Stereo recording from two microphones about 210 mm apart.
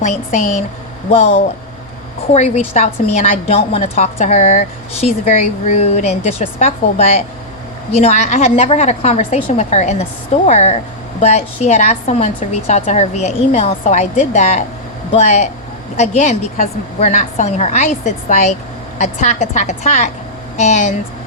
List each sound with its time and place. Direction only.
0.0 s a woman's voice: 35° left (ahead or behind)